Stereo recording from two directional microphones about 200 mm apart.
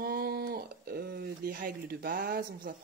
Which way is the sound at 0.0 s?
50° right (ahead or behind).